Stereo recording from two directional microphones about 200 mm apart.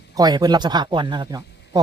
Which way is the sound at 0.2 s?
20° right (ahead or behind).